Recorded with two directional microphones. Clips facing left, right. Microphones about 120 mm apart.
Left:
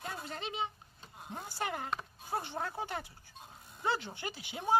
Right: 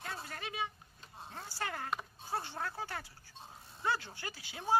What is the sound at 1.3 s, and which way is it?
Speech, 20° left (ahead or behind).